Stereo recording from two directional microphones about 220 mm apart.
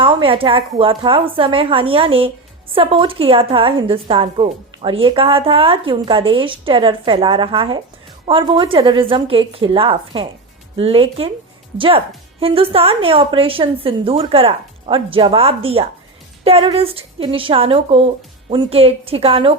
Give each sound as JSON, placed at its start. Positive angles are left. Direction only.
{"t": 0.0, "sound": "a woman's voice", "side_deg": -25}